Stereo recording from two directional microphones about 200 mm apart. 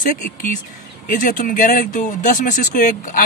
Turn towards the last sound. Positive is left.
turn(degrees=40)  # may be behind; listen again after turning